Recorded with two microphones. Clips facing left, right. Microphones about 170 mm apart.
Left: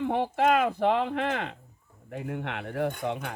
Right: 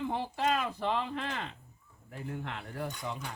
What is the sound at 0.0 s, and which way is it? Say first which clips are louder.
Speech: left 7 dB; 65° left (ahead or behind).